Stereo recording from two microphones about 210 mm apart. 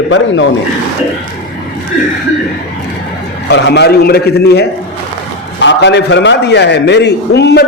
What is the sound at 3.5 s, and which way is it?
A man's voice, 55° left (ahead or behind).